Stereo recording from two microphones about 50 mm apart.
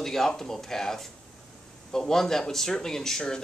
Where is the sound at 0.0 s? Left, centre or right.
Centre.